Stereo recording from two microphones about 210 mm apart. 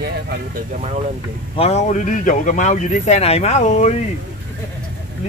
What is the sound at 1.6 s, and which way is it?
Speech, 30° left (ahead or behind).